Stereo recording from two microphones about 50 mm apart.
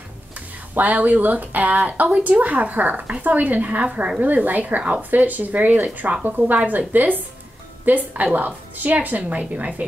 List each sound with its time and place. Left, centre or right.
0.7 s a woman's voice: right